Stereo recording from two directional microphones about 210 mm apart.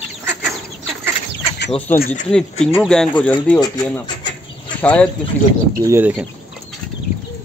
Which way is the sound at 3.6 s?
20° left (ahead or behind).